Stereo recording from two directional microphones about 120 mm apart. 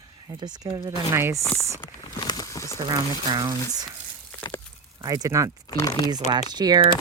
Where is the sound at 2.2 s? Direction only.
30° left (ahead or behind).